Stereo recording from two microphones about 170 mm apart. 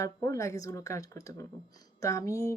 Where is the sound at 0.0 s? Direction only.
20° left (ahead or behind).